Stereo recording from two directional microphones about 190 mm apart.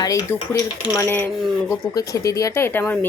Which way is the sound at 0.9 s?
10° left (ahead or behind).